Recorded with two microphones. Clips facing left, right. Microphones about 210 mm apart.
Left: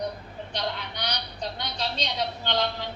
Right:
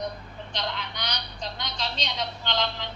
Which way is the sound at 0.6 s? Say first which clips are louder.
Left 2 dB; 35° left (ahead or behind).